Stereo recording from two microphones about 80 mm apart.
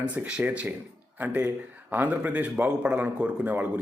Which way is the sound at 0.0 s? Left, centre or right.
Centre.